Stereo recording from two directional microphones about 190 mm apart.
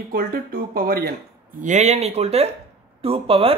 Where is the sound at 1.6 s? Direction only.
40° right (ahead or behind).